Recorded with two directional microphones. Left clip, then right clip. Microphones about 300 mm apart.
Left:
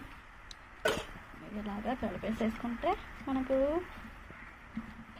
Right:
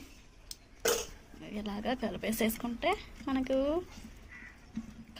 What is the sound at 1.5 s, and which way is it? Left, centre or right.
Speech, centre.